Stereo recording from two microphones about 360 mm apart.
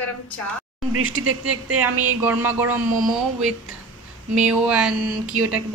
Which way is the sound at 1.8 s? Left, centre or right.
Centre.